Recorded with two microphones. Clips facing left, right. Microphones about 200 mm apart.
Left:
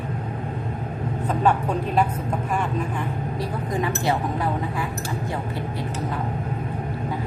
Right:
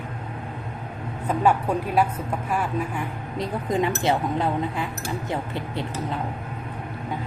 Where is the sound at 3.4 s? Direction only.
20° right (ahead or behind).